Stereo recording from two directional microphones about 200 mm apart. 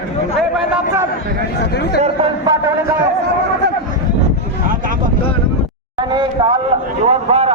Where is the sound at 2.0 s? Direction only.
30° right (ahead or behind).